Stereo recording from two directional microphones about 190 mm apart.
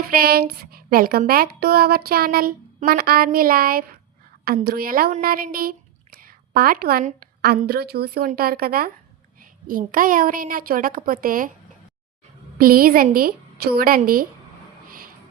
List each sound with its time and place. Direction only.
0.1 s a woman's voice: 55° right (ahead or behind)
12.5 s speech: 50° right (ahead or behind)
14.8 s a sound: 50° right (ahead or behind)